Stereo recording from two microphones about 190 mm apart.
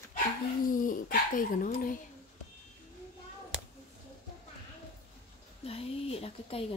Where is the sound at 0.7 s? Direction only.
45° left (ahead or behind).